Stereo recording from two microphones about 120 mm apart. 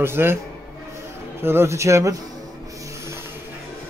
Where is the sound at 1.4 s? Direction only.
20° right (ahead or behind).